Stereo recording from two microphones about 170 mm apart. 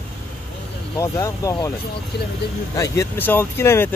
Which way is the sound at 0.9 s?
20° left (ahead or behind).